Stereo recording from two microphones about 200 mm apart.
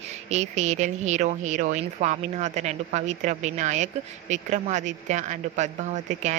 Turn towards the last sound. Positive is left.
turn(degrees=-35)  # may be behind; listen again after turning